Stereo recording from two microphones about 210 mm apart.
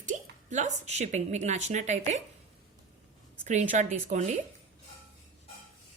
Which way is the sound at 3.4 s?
35° right (ahead or behind).